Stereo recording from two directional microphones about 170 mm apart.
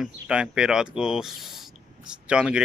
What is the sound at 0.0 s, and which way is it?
Speech, 5° right (ahead or behind).